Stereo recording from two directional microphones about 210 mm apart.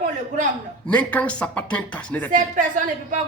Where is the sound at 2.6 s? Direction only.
35° right (ahead or behind).